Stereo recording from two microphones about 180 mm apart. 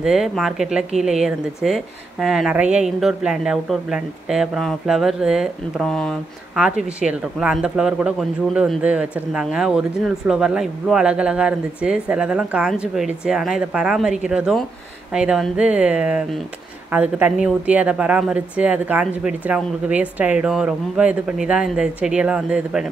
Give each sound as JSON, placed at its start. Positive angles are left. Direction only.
{"t": 0.0, "sound": "a woman's voice", "side_deg": 0}